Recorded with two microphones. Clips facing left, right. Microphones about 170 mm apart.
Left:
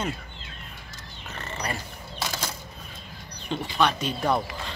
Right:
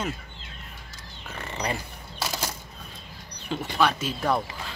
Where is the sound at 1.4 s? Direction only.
15° right (ahead or behind).